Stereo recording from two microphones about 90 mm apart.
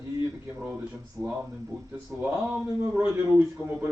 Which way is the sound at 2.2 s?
15° right (ahead or behind).